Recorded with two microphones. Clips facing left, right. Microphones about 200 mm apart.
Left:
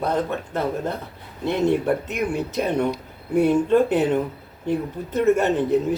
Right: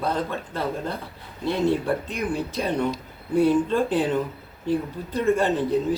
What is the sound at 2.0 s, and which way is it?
Speech, 20° left (ahead or behind).